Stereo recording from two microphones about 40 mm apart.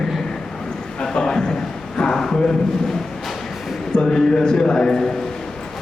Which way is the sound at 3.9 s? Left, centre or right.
Centre.